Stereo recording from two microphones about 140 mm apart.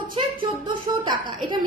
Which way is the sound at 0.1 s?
35° right (ahead or behind).